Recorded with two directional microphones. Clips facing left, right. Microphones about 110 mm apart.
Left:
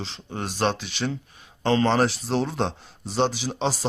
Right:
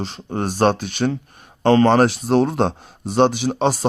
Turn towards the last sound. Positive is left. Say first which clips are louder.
# right 7 dB
turn(degrees=-55)  # may be behind; listen again after turning